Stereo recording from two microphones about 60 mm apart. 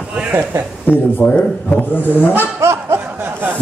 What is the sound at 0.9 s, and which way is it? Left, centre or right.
A man's voice, left.